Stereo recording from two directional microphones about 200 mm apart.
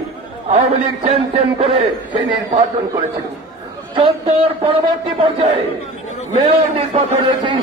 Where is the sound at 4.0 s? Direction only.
25° right (ahead or behind).